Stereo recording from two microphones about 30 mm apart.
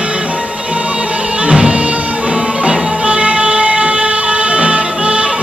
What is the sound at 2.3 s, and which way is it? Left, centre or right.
Music, right.